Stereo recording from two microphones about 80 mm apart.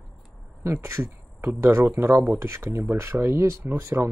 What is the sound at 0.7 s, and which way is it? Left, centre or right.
Speech, right.